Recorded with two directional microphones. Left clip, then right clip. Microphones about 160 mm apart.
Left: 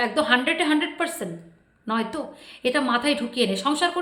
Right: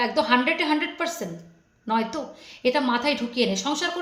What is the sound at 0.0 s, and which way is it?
A woman's voice, 20° left (ahead or behind).